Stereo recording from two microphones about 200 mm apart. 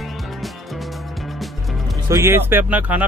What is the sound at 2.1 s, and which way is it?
Speech, 10° right (ahead or behind).